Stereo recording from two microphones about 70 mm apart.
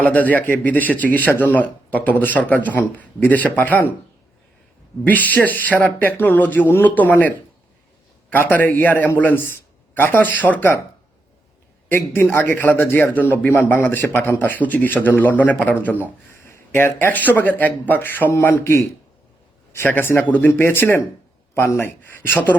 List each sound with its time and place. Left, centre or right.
0.0 s speech: left
5.0 s speech: left
11.9 s a man's voice: left
16.5 s a man's voice: left